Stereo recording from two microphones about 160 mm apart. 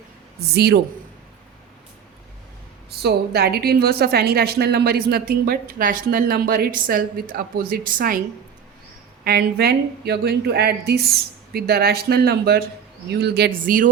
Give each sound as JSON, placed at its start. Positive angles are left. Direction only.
{"t": 0.3, "sound": "speech", "side_deg": -90}
{"t": 3.0, "sound": "a woman's voice", "side_deg": -80}
{"t": 9.2, "sound": "speech", "side_deg": -80}
{"t": 13.1, "sound": "speech", "side_deg": -90}
{"t": 13.7, "sound": "speech", "side_deg": -60}